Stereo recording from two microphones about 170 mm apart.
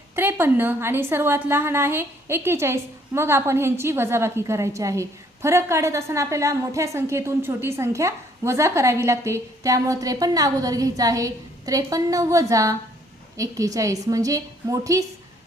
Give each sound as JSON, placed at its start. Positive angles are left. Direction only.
{"t": 0.2, "sound": "a woman's voice", "side_deg": -10}